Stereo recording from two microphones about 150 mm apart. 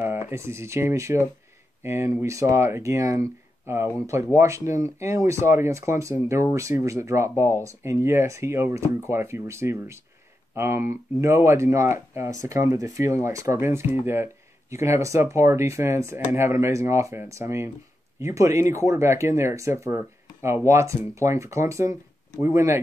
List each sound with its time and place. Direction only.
0.3 s speech: 20° right (ahead or behind)